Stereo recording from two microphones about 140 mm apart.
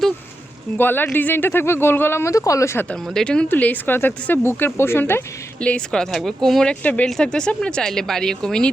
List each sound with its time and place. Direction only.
0.8 s speech: 15° left (ahead or behind)
2.9 s speech: 5° left (ahead or behind)